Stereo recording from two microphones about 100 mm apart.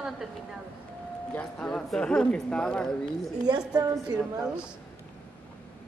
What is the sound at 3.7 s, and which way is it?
Speech, 40° right (ahead or behind).